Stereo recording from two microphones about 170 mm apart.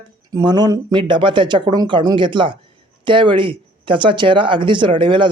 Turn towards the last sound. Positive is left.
turn(degrees=-30)  # may be behind; listen again after turning